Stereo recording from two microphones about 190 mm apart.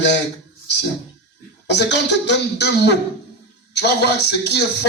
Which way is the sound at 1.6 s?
65° left (ahead or behind).